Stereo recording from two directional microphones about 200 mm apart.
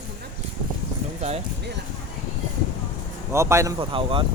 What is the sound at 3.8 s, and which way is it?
Speech, 25° right (ahead or behind).